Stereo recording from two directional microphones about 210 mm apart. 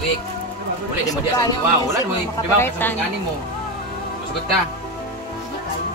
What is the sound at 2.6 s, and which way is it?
Speech, 10° left (ahead or behind).